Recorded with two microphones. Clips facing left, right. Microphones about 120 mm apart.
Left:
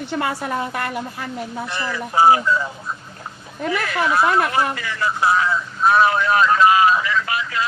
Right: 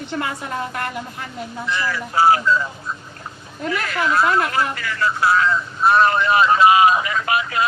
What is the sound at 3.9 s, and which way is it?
Speech, 10° left (ahead or behind).